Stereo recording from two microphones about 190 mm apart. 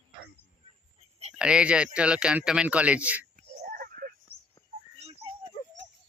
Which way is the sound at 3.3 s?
50° right (ahead or behind).